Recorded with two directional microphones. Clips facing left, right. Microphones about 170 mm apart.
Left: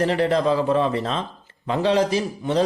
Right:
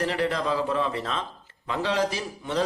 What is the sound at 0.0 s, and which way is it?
A man's voice, 30° left (ahead or behind).